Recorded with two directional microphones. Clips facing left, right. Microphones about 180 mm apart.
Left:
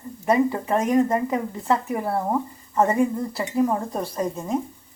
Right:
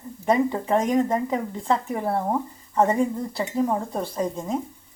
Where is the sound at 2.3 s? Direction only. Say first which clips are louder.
Left 1 dB; 10° right (ahead or behind).